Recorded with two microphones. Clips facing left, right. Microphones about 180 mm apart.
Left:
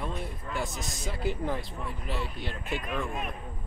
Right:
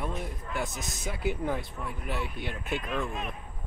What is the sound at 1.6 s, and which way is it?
Speech, 55° right (ahead or behind).